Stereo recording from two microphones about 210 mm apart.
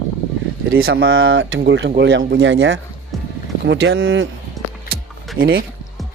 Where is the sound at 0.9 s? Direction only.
70° right (ahead or behind).